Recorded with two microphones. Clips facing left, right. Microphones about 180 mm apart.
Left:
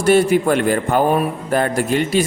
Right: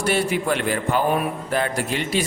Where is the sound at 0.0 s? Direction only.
45° left (ahead or behind).